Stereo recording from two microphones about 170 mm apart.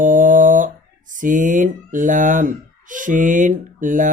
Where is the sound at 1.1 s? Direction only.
50° right (ahead or behind).